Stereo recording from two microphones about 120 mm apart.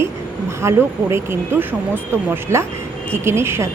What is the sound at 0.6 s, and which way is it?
Speech, 20° right (ahead or behind).